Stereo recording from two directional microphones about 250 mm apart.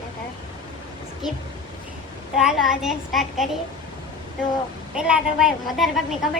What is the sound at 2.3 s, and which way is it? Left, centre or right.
A woman's voice, centre.